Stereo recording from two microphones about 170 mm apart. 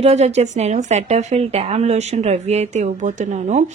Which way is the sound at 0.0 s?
40° right (ahead or behind).